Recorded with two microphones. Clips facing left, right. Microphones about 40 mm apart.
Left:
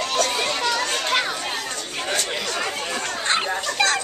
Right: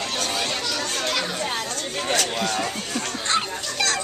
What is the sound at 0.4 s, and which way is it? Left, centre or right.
Children playing, left.